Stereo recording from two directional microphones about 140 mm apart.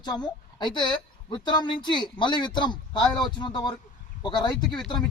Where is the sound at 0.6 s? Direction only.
35° left (ahead or behind).